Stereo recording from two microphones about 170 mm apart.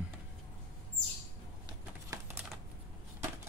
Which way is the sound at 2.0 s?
15° right (ahead or behind).